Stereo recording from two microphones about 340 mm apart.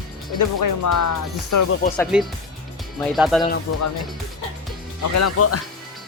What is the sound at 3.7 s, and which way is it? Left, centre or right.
Speech, left.